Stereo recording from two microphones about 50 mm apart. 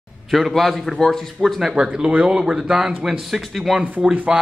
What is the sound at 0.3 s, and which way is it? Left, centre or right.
Speech, centre.